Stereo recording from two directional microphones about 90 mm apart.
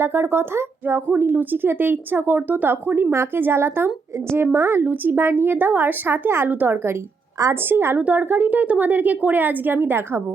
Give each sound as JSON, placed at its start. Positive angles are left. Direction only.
{"t": 0.0, "sound": "speech", "side_deg": -25}